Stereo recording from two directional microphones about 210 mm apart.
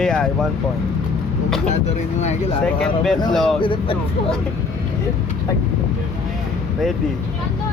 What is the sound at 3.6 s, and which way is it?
Speech, 25° left (ahead or behind).